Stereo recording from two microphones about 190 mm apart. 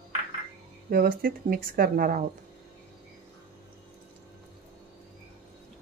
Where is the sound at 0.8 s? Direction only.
50° right (ahead or behind).